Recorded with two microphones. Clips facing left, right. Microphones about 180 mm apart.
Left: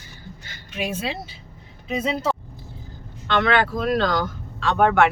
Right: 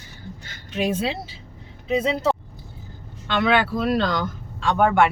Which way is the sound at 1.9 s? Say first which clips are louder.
Right 3 dB; 25° right (ahead or behind).